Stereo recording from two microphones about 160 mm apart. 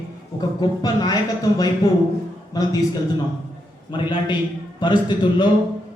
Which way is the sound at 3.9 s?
30° left (ahead or behind).